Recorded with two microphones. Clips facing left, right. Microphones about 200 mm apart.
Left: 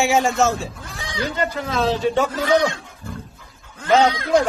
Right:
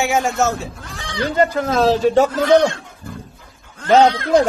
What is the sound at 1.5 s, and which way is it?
Speech, 45° right (ahead or behind).